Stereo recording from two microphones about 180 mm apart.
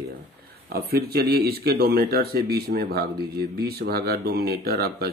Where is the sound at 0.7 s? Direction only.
60° right (ahead or behind).